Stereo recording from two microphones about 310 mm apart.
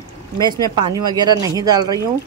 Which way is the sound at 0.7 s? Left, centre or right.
Centre.